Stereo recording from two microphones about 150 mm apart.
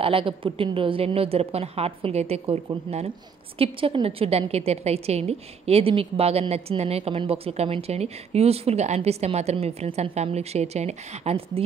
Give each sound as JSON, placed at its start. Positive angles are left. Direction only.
{"t": 0.0, "sound": "a woman's voice", "side_deg": -35}